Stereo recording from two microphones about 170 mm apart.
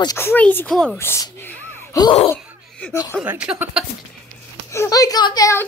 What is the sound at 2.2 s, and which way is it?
Laughter, 10° left (ahead or behind).